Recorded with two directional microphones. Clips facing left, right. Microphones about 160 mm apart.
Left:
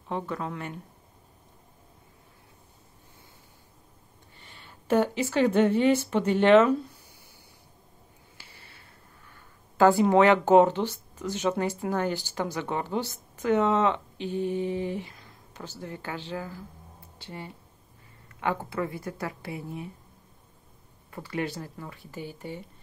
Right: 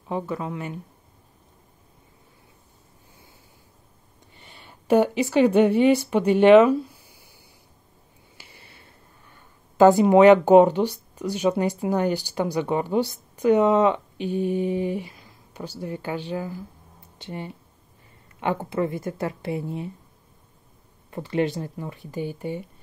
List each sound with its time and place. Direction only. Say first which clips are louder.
0.1 s speech: right 4 dB; 5° right (ahead or behind)
4.4 s speech: right 3 dB; 15° right (ahead or behind)
8.4 s a sound: right 4 dB; 15° right (ahead or behind)
9.8 s a woman's voice: right 5 dB; 20° right (ahead or behind)
21.1 s a woman's voice: right 8 dB; 25° right (ahead or behind)